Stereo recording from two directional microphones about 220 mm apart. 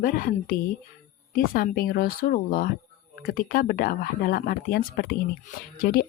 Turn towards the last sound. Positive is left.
turn(degrees=40)  # may be behind; listen again after turning